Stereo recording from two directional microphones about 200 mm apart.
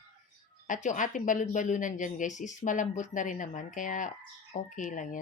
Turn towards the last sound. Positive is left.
turn(degrees=40)  # may be behind; listen again after turning